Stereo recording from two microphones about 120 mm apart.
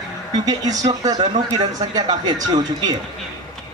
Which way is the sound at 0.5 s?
30° right (ahead or behind).